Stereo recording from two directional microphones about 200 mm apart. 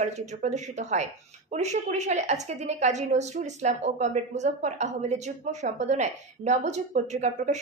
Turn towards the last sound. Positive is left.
turn(degrees=-35)  # may be behind; listen again after turning